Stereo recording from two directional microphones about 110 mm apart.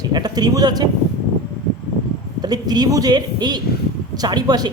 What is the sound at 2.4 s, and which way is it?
A man's voice, 40° right (ahead or behind).